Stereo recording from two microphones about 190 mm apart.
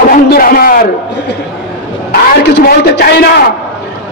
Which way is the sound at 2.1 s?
60° left (ahead or behind).